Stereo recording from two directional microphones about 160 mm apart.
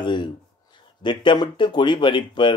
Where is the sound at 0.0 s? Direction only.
30° left (ahead or behind).